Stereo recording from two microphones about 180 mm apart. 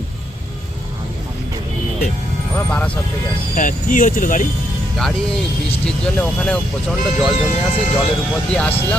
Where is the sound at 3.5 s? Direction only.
45° left (ahead or behind).